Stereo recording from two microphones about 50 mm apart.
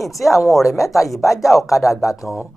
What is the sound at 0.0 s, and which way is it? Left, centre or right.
Speech, centre.